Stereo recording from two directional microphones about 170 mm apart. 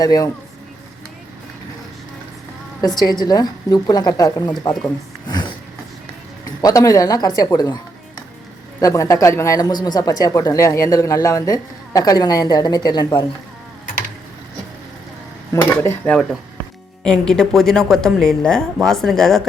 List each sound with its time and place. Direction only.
0.0 s speech: 20° left (ahead or behind)
2.8 s speech: 25° left (ahead or behind)
5.3 s a sound: 25° left (ahead or behind)
6.6 s speech: 20° left (ahead or behind)
8.8 s speech: 20° left (ahead or behind)
15.8 s speech: 10° left (ahead or behind)